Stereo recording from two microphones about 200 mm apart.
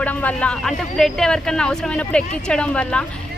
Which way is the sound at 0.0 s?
10° left (ahead or behind).